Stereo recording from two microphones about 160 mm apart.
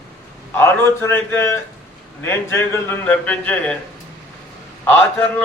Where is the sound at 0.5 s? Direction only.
15° left (ahead or behind).